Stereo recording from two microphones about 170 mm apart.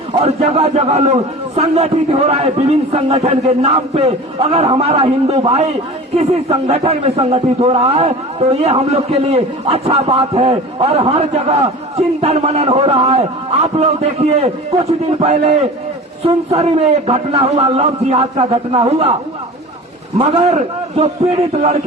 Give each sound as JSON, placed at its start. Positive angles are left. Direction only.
{"t": 0.2, "sound": "a man's voice", "side_deg": -35}
{"t": 20.1, "sound": "a man's voice", "side_deg": -35}